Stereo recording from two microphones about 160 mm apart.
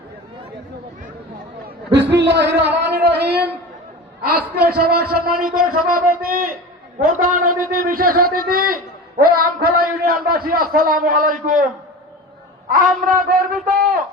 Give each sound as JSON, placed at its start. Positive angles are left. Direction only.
{"t": 1.6, "sound": "a man's voice", "side_deg": -90}
{"t": 4.2, "sound": "a man's voice", "side_deg": -75}
{"t": 12.7, "sound": "a man's voice", "side_deg": -60}